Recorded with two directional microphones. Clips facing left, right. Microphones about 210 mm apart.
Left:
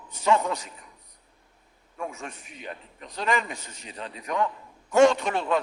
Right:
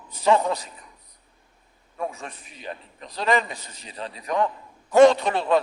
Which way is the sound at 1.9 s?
35° right (ahead or behind).